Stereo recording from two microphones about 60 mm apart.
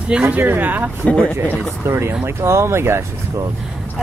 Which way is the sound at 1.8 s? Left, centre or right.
Right.